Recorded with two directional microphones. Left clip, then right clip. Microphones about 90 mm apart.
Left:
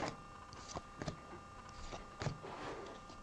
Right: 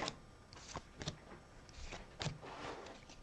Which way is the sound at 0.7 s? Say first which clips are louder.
Left 1 dB; 25° right (ahead or behind).